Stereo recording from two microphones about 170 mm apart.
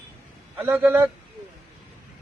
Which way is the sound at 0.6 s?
10° right (ahead or behind).